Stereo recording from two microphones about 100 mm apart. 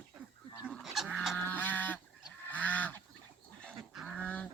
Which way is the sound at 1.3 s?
20° left (ahead or behind).